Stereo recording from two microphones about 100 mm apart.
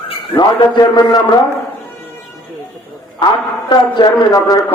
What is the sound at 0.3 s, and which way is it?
A man's voice, 40° left (ahead or behind).